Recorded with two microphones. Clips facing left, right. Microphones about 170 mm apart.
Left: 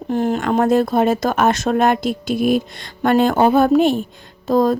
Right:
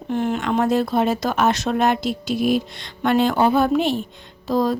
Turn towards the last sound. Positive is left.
turn(degrees=50)  # may be behind; listen again after turning